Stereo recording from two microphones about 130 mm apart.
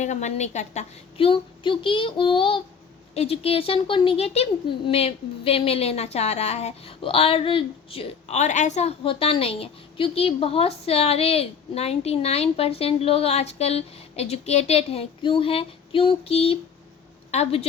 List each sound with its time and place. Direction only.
0.0 s a woman's voice: 65° left (ahead or behind)
1.3 s child singing: 40° left (ahead or behind)
3.2 s speech: 50° left (ahead or behind)